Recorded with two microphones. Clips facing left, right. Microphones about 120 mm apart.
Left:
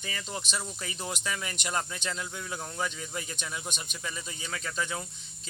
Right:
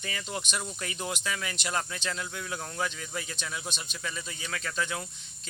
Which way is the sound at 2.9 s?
20° left (ahead or behind).